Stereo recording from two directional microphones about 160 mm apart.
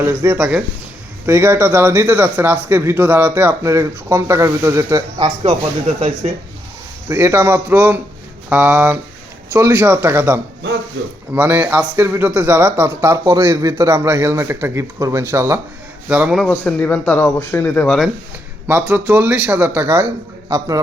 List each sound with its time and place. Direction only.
0.0 s speech: 20° right (ahead or behind)
0.3 s speech: 5° right (ahead or behind)
1.3 s speech: 15° right (ahead or behind)
7.1 s speech: 15° right (ahead or behind)
16.5 s speech: 10° left (ahead or behind)
18.7 s speech: 10° right (ahead or behind)